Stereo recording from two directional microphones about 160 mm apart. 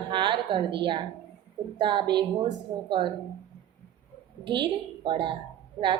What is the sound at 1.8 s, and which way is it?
A woman's voice, 30° right (ahead or behind).